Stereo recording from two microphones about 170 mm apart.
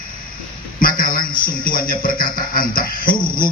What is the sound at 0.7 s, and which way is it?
A man's voice, 55° left (ahead or behind).